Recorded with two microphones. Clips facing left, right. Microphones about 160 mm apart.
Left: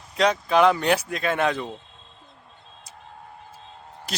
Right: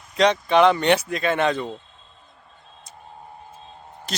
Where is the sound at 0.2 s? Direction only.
5° left (ahead or behind).